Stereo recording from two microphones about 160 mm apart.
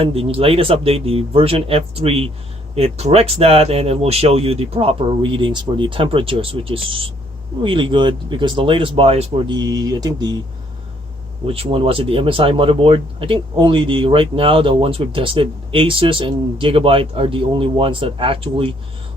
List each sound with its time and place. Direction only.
0.0 s speech: 35° right (ahead or behind)
9.6 s speech: 25° right (ahead or behind)
11.4 s speech: 35° right (ahead or behind)